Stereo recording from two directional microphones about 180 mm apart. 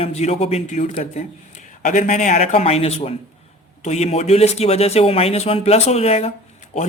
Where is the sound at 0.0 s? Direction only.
35° left (ahead or behind).